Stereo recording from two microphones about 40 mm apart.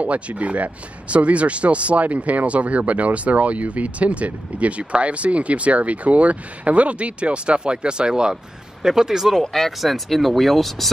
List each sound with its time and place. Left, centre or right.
0.0 s speech: right; by 9.3 s centre
9.3 s speech: centre